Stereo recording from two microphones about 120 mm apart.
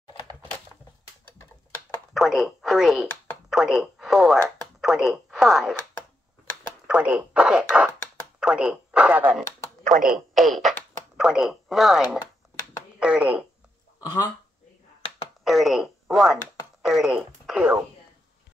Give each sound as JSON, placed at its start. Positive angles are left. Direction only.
{"t": 2.1, "sound": "speech", "side_deg": 0}
{"t": 6.9, "sound": "speech", "side_deg": -10}
{"t": 7.3, "sound": "a sound", "side_deg": -5}
{"t": 8.4, "sound": "speech", "side_deg": -5}
{"t": 13.0, "sound": "a sound", "side_deg": -10}
{"t": 13.9, "sound": "speech", "side_deg": 30}
{"t": 15.4, "sound": "radio", "side_deg": 0}
{"t": 16.8, "sound": "speech", "side_deg": -5}